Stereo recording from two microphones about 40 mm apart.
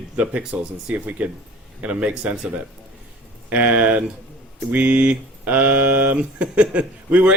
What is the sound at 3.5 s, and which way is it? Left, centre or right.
Speech, right.